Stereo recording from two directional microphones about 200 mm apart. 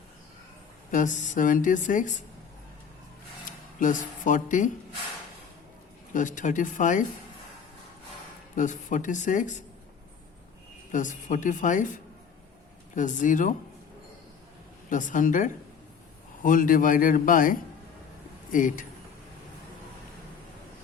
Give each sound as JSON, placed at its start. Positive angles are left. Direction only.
{"t": 0.9, "sound": "speech", "side_deg": 40}
{"t": 3.4, "sound": "speech", "side_deg": 40}
{"t": 6.1, "sound": "speech", "side_deg": 40}
{"t": 8.5, "sound": "speech", "side_deg": 40}
{"t": 10.9, "sound": "speech", "side_deg": 40}
{"t": 13.0, "sound": "speech", "side_deg": 40}
{"t": 14.8, "sound": "a man's voice", "side_deg": 40}